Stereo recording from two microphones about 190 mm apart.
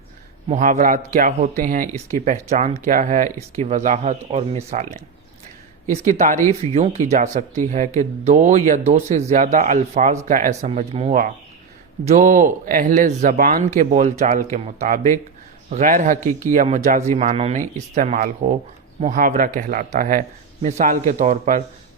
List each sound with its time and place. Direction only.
0.4 s speech: 40° right (ahead or behind)
6.1 s speech: 40° right (ahead or behind)